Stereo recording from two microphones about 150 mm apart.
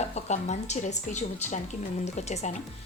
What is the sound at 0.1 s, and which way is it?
A woman's voice, 50° left (ahead or behind).